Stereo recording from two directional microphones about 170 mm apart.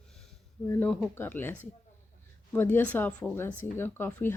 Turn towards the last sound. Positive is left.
turn(degrees=10)  # may be behind; listen again after turning